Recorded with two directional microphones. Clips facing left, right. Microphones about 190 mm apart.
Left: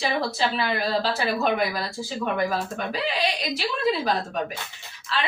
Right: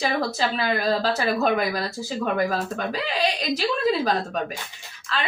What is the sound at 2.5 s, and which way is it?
Speech, 40° right (ahead or behind).